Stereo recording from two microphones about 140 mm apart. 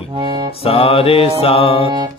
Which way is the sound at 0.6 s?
45° left (ahead or behind).